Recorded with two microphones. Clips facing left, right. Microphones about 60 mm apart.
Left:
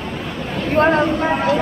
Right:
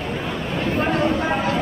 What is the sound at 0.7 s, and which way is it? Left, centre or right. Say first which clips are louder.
Vehicle: left 8 dB; left.